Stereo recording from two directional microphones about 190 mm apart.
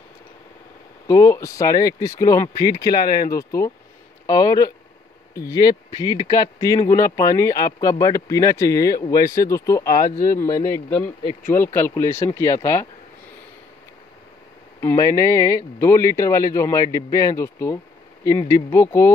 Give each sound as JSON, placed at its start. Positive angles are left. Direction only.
{"t": 1.0, "sound": "speech", "side_deg": 15}
{"t": 14.8, "sound": "speech", "side_deg": 15}